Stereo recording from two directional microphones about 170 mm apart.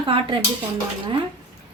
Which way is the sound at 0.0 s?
30° right (ahead or behind).